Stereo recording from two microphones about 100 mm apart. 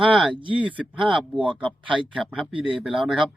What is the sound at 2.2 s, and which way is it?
Speech, 5° right (ahead or behind).